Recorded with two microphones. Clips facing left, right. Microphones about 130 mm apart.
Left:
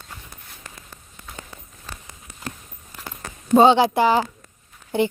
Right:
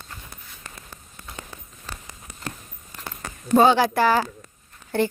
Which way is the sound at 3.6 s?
20° left (ahead or behind).